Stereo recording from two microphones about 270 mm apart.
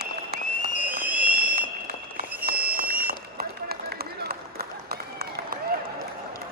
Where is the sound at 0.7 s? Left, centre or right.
Centre.